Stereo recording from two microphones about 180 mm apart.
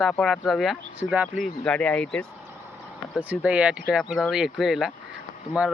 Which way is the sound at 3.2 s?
10° right (ahead or behind).